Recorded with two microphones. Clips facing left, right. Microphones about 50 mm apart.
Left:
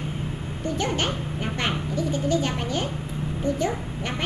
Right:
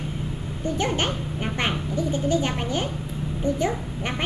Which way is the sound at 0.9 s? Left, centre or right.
Right.